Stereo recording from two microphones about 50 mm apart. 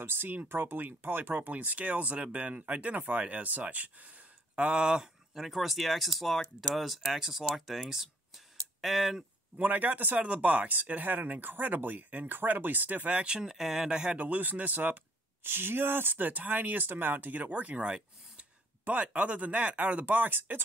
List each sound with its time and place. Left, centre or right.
0.0 s speech: right
4.6 s speech: right; by 9.2 s centre
9.6 s speech: right
13.1 s speech: centre
14.1 s speech: right
15.4 s speech: right
18.9 s speech: right